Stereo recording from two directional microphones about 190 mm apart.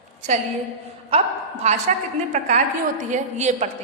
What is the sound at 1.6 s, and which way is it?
Speech, 35° right (ahead or behind).